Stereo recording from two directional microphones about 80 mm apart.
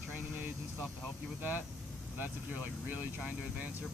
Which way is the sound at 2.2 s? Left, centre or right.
Right.